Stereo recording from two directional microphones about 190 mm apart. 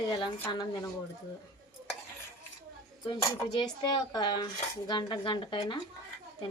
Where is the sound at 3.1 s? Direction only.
25° left (ahead or behind).